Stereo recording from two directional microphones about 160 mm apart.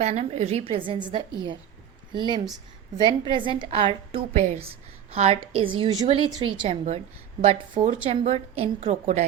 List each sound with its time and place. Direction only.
0.0 s a woman's voice: 40° right (ahead or behind)